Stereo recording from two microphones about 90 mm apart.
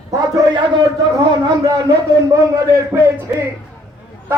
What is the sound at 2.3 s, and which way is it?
Speech, 35° right (ahead or behind).